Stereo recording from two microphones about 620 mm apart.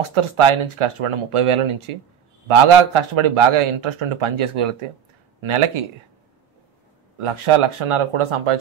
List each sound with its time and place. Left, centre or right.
0.1 s a man's voice: right
7.2 s a man's voice: right